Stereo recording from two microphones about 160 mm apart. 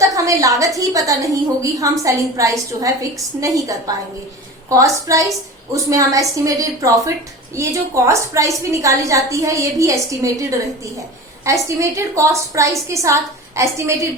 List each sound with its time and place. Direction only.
0.0 s a woman's voice: 20° right (ahead or behind)
4.7 s a woman's voice: 20° right (ahead or behind)
11.4 s a woman's voice: 20° right (ahead or behind)